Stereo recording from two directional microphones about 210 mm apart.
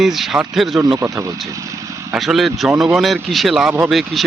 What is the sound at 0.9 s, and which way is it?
Speech, 10° right (ahead or behind).